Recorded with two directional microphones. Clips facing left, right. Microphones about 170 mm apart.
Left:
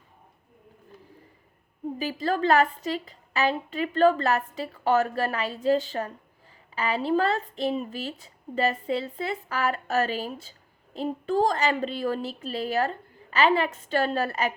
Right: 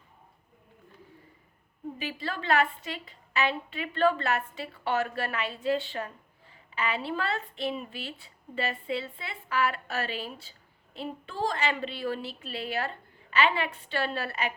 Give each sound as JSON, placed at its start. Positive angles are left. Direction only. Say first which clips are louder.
{"t": 2.0, "sound": "a woman's voice", "louder": "left 10 dB", "side_deg": 40}